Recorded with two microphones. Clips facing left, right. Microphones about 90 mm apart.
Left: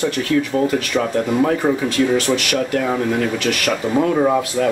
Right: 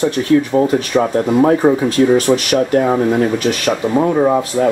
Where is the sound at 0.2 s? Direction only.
30° right (ahead or behind).